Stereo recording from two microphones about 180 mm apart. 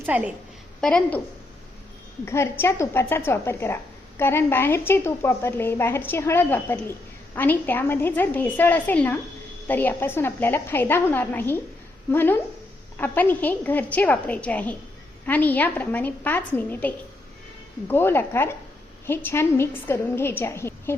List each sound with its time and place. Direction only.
0.0 s a woman's voice: 10° right (ahead or behind)
0.8 s a woman's voice: 5° left (ahead or behind)
2.2 s a woman's voice: 15° left (ahead or behind)